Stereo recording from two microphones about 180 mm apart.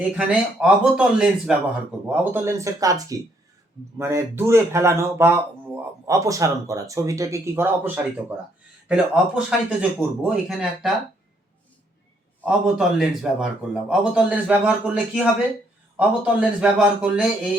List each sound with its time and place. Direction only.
0.2 s speech: 5° right (ahead or behind)
12.4 s speech: 5° right (ahead or behind)